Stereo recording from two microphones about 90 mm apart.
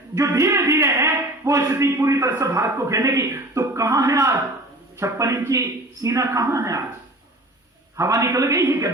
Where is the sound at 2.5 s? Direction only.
35° right (ahead or behind).